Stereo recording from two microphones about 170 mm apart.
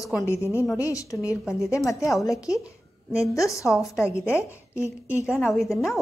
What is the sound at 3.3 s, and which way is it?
A woman's voice, 20° left (ahead or behind).